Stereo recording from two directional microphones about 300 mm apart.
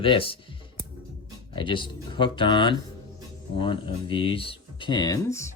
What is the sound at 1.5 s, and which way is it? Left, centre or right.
Speech, centre.